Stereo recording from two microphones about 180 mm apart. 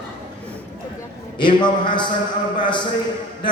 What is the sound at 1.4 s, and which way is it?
Speech, 25° left (ahead or behind).